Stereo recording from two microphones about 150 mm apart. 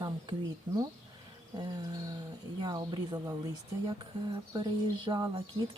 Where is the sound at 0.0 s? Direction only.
25° right (ahead or behind).